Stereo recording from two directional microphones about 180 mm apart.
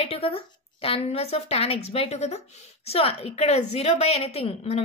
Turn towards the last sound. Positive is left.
turn(degrees=35)  # may be behind; listen again after turning